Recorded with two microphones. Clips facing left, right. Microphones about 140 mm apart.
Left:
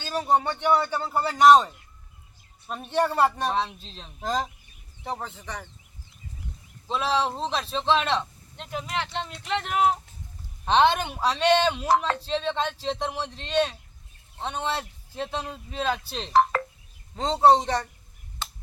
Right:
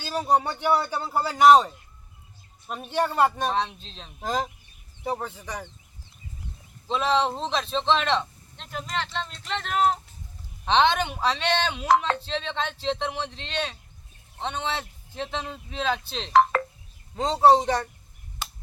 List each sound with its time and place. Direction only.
0.0 s speech: 5° right (ahead or behind)
6.8 s speech: 5° left (ahead or behind)
16.3 s speech: 90° right
17.2 s speech: 5° right (ahead or behind)